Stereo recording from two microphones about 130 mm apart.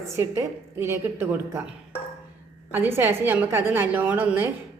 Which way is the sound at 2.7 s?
15° right (ahead or behind).